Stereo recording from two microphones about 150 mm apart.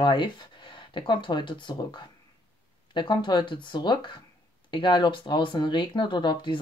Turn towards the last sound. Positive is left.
turn(degrees=30)  # may be behind; listen again after turning